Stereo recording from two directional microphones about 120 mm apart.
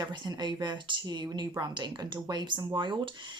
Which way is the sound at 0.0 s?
35° right (ahead or behind).